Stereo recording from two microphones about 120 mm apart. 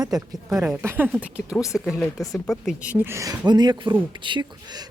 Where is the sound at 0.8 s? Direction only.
20° right (ahead or behind).